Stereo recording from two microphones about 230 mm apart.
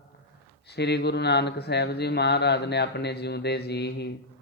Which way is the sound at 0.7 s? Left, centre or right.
Left.